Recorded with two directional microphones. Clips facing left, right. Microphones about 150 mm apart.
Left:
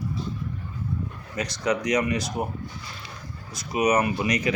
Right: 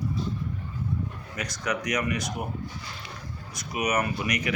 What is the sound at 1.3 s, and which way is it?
Speech, 30° left (ahead or behind).